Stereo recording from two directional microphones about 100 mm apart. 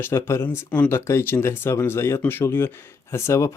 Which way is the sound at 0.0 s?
25° left (ahead or behind).